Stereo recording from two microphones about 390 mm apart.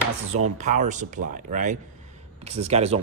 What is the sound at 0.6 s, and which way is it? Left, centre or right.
Speech, centre.